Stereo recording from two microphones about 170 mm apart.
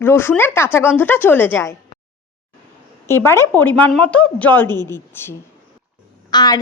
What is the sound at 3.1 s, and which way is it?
A woman's voice, 15° left (ahead or behind).